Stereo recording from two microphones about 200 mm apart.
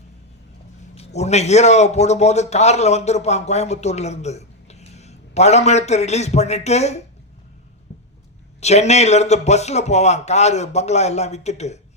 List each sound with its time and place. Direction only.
0.9 s a man's voice: 30° left (ahead or behind)
8.6 s a man's voice: 35° left (ahead or behind)